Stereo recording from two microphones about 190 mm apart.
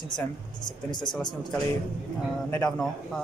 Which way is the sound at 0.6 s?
20° left (ahead or behind).